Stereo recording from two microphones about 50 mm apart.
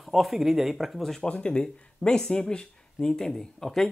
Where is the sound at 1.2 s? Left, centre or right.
Left.